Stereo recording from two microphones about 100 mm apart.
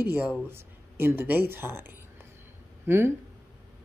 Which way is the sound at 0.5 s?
25° right (ahead or behind).